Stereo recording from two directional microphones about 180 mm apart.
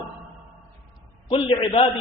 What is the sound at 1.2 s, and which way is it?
Speech, 25° left (ahead or behind).